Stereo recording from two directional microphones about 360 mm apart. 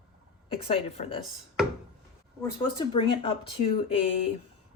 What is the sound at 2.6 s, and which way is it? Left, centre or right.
Speech, centre.